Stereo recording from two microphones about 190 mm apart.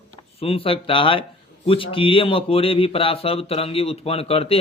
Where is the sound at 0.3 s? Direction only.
30° left (ahead or behind).